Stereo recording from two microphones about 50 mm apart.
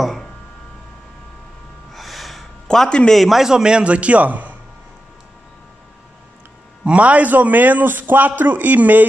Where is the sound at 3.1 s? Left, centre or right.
Centre; by 4.6 s right.